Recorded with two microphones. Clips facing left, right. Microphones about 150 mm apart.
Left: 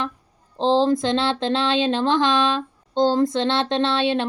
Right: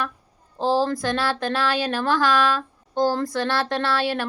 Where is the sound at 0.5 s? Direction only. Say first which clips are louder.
Left 3 dB; 20° left (ahead or behind).